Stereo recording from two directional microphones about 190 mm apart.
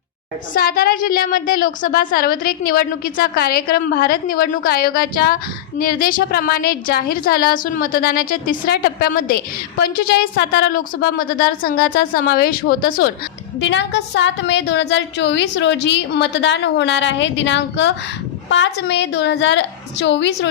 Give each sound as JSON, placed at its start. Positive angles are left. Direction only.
{"t": 0.5, "sound": "a woman's voice", "side_deg": 50}
{"t": 13.6, "sound": "a woman's voice", "side_deg": 70}